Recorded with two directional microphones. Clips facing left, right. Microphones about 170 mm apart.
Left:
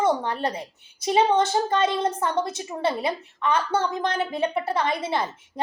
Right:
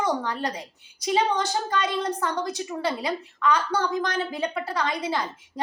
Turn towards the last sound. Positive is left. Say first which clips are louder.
# left 2 dB
turn(degrees=25)  # may be behind; listen again after turning